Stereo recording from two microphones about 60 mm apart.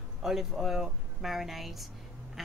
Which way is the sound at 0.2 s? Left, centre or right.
Centre.